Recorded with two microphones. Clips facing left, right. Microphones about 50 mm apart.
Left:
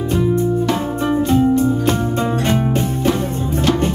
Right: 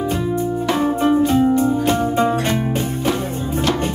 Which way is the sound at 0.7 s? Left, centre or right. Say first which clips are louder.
Right 2 dB; centre.